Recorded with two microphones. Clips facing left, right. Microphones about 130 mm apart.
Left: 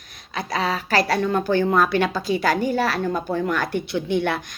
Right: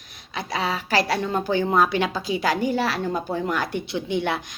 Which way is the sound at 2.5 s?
55° left (ahead or behind).